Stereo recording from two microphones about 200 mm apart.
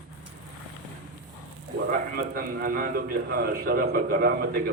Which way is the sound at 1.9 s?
45° right (ahead or behind).